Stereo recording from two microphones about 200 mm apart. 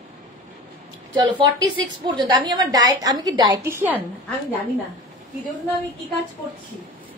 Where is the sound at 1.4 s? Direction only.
20° right (ahead or behind).